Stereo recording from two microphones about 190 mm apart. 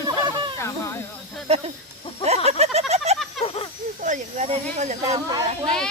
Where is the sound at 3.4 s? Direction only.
30° left (ahead or behind).